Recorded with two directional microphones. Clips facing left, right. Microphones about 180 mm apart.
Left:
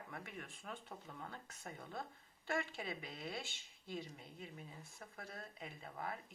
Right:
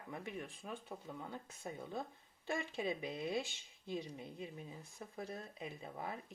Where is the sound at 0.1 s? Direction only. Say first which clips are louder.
Right 9 dB; 15° right (ahead or behind).